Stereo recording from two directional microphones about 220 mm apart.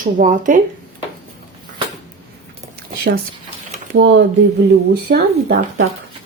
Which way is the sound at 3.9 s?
55° right (ahead or behind).